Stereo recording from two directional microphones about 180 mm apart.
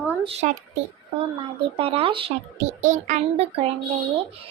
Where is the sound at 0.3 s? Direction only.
35° right (ahead or behind).